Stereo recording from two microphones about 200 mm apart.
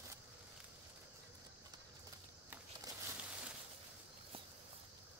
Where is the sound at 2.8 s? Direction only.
20° right (ahead or behind).